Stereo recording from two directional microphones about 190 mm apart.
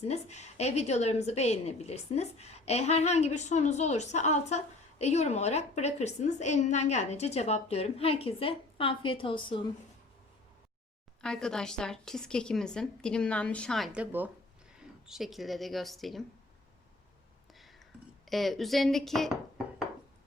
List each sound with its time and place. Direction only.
0.0 s a woman's voice: 35° left (ahead or behind)
11.2 s a woman's voice: 5° left (ahead or behind)
17.5 s a sound: centre (ahead or behind)
18.3 s a woman's voice: centre (ahead or behind)